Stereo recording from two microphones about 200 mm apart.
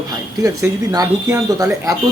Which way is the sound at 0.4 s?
15° right (ahead or behind).